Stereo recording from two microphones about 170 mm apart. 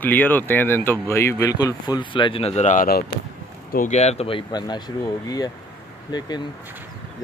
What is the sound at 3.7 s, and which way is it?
Speech, 45° left (ahead or behind).